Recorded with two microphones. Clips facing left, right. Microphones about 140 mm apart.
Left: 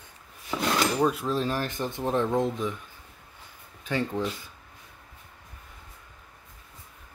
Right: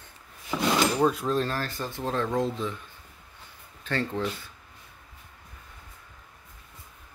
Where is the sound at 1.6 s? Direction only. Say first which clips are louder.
Left 2 dB; 20° left (ahead or behind).